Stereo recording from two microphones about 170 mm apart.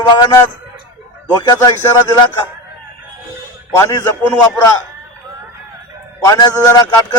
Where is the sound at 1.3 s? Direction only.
25° left (ahead or behind).